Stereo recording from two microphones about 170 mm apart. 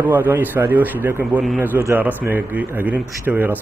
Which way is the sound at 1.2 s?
Centre (ahead or behind).